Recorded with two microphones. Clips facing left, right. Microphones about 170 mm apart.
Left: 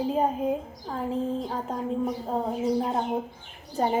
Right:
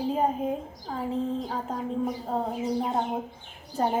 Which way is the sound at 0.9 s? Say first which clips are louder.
Left 1 dB; 40° left (ahead or behind).